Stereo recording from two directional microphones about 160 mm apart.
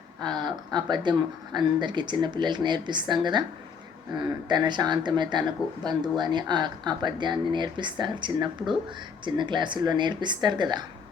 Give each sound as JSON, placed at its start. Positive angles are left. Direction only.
{"t": 0.2, "sound": "speech", "side_deg": -25}
{"t": 4.2, "sound": "speech", "side_deg": -25}